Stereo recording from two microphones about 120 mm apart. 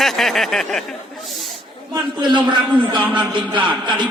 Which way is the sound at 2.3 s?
40° right (ahead or behind).